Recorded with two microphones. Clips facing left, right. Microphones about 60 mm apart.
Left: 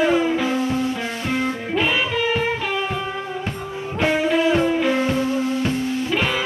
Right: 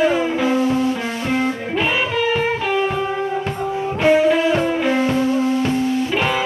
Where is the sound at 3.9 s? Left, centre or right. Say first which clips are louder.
Right 4 dB; centre.